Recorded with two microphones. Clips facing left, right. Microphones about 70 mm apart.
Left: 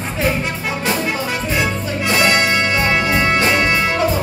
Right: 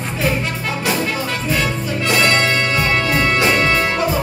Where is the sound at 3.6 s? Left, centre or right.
Centre.